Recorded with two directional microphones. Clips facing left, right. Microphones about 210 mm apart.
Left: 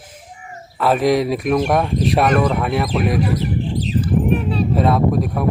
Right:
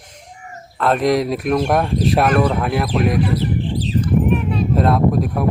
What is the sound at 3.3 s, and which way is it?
Bird, 30° right (ahead or behind).